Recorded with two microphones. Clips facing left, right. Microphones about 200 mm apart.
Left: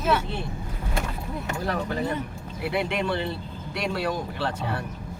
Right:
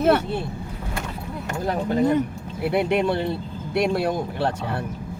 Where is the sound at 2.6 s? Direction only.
50° right (ahead or behind).